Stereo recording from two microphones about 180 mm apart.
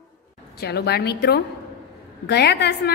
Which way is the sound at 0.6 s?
65° left (ahead or behind).